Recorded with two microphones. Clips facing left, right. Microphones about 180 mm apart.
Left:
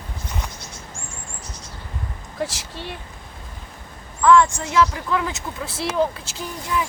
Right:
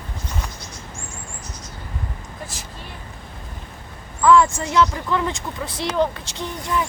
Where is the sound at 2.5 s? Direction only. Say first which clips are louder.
Left 3 dB; 90° left.